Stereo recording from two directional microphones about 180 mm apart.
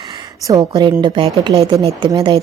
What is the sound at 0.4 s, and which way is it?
A woman's voice, 20° right (ahead or behind).